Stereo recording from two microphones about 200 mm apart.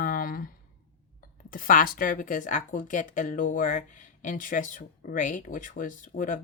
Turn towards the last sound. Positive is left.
turn(degrees=40)  # may be behind; listen again after turning